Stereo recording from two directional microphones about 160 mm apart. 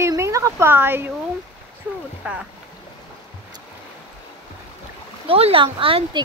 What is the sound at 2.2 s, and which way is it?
Speech, 10° right (ahead or behind).